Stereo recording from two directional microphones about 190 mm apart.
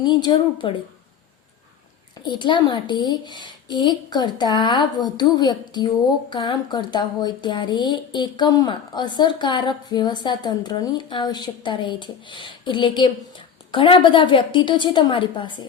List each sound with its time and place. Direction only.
0.0 s speech: 25° left (ahead or behind)
2.2 s speech: 25° left (ahead or behind)